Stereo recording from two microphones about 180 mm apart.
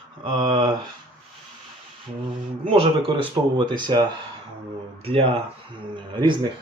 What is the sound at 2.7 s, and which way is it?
Speech, 30° right (ahead or behind).